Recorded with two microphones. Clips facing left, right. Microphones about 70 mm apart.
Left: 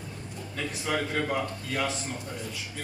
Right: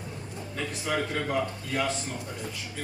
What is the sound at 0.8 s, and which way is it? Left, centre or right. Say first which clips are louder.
A man's voice: left 1 dB; centre.